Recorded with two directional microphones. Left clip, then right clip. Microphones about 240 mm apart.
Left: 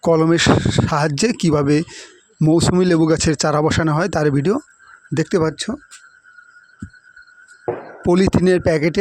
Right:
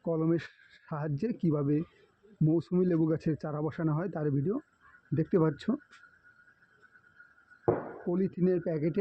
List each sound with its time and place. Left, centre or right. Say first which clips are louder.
0.1 s speech: left 17 dB; left
3.4 s speech: left 18 dB; left
5.4 s speech: left 10 dB; left
8.1 s speech: left 15 dB; left